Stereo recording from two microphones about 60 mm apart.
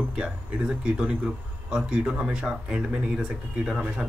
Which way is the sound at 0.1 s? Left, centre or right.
Centre.